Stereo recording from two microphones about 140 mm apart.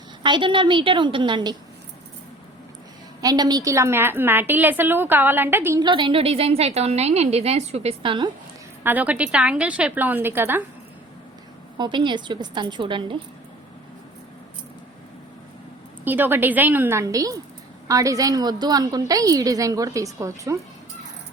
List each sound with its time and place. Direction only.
0.2 s a woman's voice: 35° right (ahead or behind)
3.2 s a woman's voice: 30° right (ahead or behind)
5.8 s a woman's voice: 35° right (ahead or behind)
8.8 s a woman's voice: 10° right (ahead or behind)
11.8 s a woman's voice: 35° right (ahead or behind)
16.0 s a woman's voice: 15° right (ahead or behind)